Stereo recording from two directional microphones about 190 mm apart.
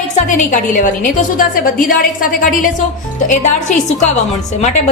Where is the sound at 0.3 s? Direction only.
40° left (ahead or behind).